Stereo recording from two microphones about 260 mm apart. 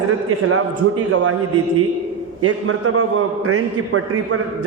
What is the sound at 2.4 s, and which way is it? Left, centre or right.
A man's voice, right.